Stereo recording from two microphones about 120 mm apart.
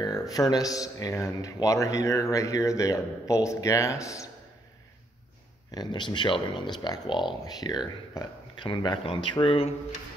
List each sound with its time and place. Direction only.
0.0 s speech: 30° left (ahead or behind)
5.7 s speech: 35° left (ahead or behind); by 9.8 s 55° left (ahead or behind)